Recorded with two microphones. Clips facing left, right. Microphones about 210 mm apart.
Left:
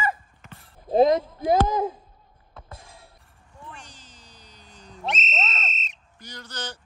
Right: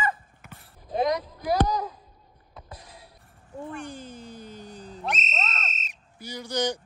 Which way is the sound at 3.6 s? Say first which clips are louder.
Right 10 dB; 55° right (ahead or behind).